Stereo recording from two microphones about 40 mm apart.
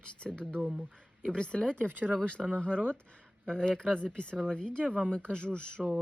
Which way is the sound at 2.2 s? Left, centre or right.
Left.